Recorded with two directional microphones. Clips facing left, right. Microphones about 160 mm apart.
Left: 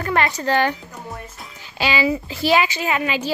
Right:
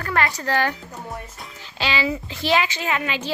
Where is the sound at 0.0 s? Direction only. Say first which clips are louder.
Left 3 dB; 20° left (ahead or behind).